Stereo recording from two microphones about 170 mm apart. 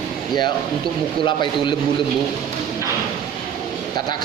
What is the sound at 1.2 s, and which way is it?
Speech, 25° left (ahead or behind).